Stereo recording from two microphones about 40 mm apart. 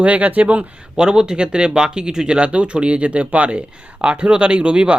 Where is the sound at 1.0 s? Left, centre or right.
Centre.